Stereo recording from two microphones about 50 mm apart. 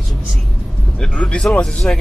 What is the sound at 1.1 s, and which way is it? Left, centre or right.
Speech, left.